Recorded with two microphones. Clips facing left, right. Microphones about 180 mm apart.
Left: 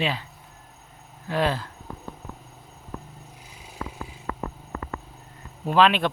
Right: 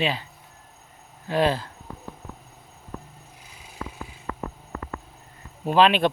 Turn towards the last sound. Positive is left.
turn(degrees=-25)  # may be behind; listen again after turning